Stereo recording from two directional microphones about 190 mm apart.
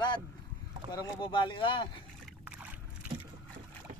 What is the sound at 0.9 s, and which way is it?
Speech, 25° left (ahead or behind).